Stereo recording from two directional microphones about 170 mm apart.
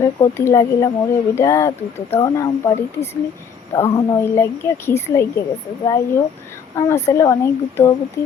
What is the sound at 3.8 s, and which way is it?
A child's voice, 15° left (ahead or behind).